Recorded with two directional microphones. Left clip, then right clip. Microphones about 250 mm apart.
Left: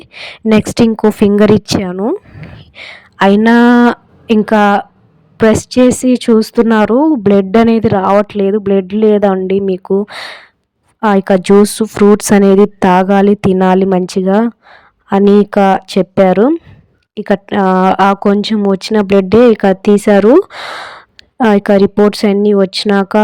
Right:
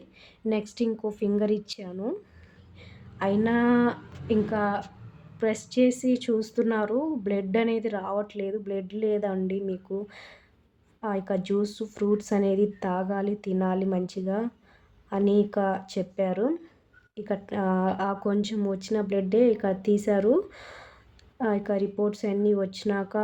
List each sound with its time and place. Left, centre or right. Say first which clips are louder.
0.0 s speech: left 15 dB; left